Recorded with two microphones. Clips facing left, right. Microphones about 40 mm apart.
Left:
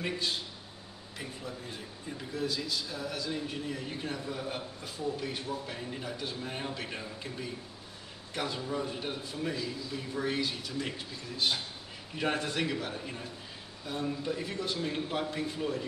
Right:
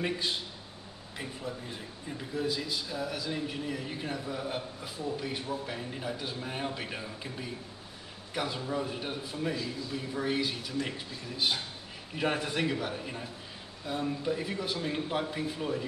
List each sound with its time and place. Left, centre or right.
2.3 s a man's voice: centre
2.9 s a man's voice: centre